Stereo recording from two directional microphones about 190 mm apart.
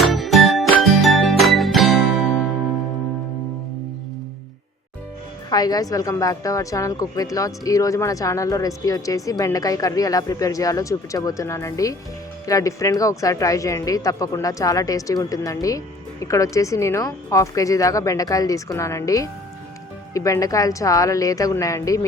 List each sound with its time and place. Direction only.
0.0 s music: centre (ahead or behind)
5.5 s a woman's voice: 20° left (ahead or behind)